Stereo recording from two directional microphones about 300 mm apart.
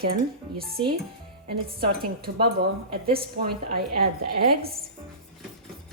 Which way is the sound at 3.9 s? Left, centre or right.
Right.